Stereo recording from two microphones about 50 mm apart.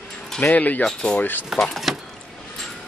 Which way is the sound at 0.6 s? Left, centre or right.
Left.